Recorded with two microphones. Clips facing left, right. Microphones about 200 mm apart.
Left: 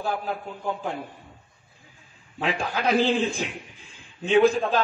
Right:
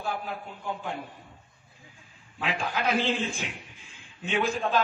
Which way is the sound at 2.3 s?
40° left (ahead or behind).